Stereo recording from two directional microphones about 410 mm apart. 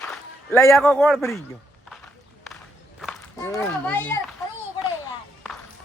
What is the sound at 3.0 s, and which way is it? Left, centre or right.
Speech, centre.